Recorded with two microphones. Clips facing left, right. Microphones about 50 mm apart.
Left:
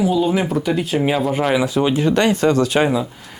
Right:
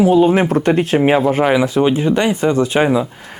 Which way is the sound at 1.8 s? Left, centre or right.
Right.